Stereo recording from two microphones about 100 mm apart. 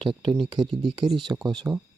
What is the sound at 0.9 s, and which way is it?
Speech, 50° right (ahead or behind).